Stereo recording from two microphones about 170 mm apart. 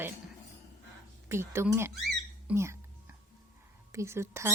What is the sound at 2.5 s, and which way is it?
Speech, 15° right (ahead or behind).